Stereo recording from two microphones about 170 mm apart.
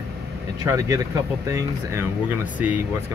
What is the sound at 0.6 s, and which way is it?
Speech, 20° right (ahead or behind).